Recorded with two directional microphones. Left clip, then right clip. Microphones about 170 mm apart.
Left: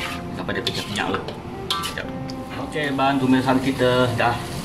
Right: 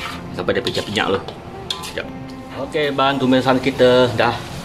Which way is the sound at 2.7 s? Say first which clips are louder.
Right 4 dB; 60° right (ahead or behind).